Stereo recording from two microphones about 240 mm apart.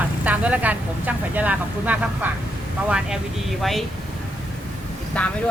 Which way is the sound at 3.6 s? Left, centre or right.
Centre.